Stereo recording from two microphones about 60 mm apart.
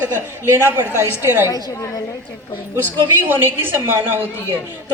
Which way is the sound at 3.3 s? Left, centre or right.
Right.